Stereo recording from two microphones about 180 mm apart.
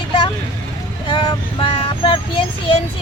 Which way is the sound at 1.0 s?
30° left (ahead or behind).